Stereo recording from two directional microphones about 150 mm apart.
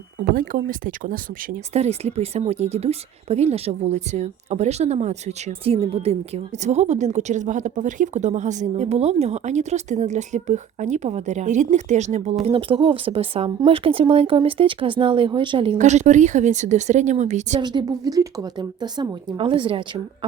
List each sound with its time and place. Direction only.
0.3 s speech: 65° right (ahead or behind)
1.7 s a woman's voice: 45° right (ahead or behind)
15.8 s a woman's voice: 50° right (ahead or behind)
17.6 s a woman's voice: 30° right (ahead or behind)